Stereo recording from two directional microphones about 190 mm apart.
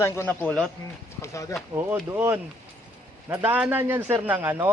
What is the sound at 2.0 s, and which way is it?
A man's voice, 10° right (ahead or behind).